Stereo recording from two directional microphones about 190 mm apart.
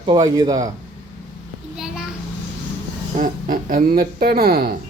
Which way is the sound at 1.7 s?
5° right (ahead or behind).